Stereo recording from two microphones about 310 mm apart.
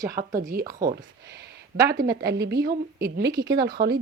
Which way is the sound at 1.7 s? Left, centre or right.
Right.